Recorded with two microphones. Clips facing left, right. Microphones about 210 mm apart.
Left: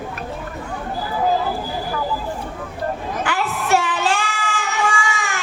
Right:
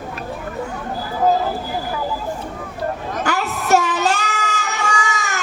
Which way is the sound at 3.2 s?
40° right (ahead or behind).